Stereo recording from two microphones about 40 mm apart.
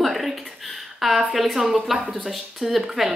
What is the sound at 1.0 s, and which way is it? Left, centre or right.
Speech, centre.